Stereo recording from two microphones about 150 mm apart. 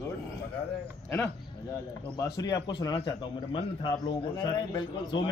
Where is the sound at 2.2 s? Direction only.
25° left (ahead or behind).